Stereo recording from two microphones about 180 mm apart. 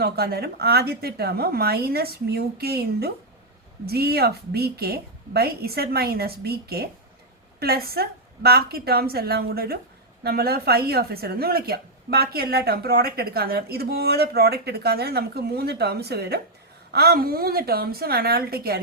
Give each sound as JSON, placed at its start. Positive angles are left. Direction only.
{"t": 0.0, "sound": "a woman's voice", "side_deg": -60}